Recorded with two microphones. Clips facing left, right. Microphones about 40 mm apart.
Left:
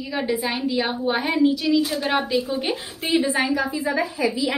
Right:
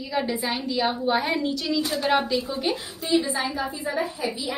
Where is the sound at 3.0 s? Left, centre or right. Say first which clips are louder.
Left 3 dB; left.